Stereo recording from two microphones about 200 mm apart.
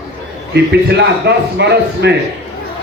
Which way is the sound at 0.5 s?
55° right (ahead or behind).